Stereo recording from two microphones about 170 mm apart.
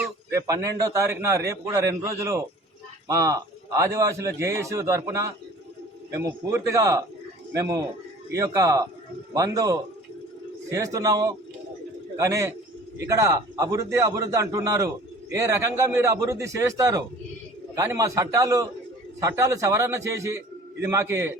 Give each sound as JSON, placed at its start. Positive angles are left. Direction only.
{"t": 0.3, "sound": "a man's voice", "side_deg": -20}